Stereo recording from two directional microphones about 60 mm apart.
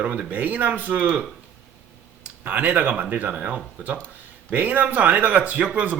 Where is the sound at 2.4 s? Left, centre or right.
Right.